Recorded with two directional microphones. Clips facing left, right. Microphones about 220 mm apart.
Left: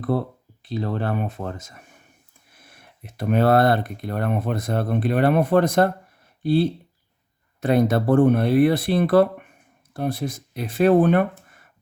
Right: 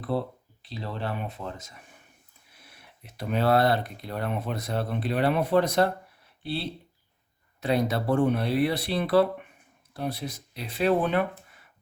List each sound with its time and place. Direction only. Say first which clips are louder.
0.7 s speech: left 8 dB; 50° left (ahead or behind)